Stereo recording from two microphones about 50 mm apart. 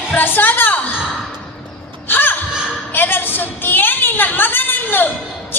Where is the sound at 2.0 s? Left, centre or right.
Left.